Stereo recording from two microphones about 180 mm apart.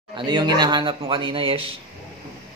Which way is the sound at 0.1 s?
25° right (ahead or behind).